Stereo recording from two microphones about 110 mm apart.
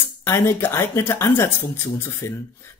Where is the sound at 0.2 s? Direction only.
20° left (ahead or behind).